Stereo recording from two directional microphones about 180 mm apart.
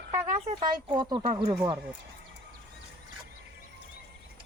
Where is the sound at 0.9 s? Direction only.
25° right (ahead or behind).